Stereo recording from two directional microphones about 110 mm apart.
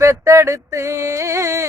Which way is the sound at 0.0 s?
30° right (ahead or behind).